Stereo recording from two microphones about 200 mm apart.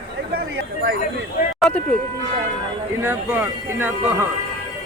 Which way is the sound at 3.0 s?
10° right (ahead or behind).